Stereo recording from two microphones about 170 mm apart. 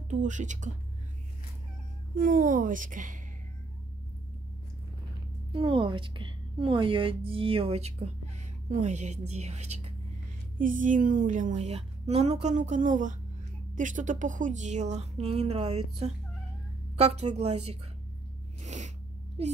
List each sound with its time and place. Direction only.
0.1 s a woman's voice: 45° right (ahead or behind)
2.1 s a woman's voice: 50° right (ahead or behind)
5.5 s a woman's voice: 30° right (ahead or behind)
18.6 s sneeze: 45° right (ahead or behind)